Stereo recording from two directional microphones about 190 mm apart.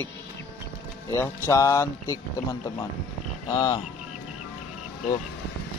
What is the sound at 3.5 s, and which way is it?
Speech, 20° left (ahead or behind).